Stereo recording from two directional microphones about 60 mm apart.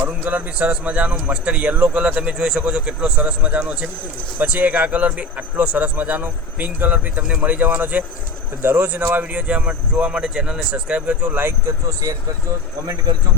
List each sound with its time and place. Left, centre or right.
0.0 s a man's voice: right
7.2 s a man's voice: centre